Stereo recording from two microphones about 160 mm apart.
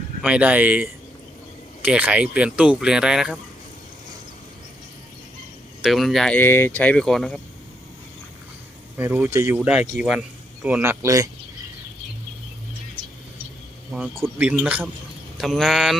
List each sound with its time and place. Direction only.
0.2 s speech: 5° right (ahead or behind)
5.8 s speech: centre (ahead or behind)
9.0 s a man's voice: 10° right (ahead or behind)
13.9 s speech: 10° right (ahead or behind)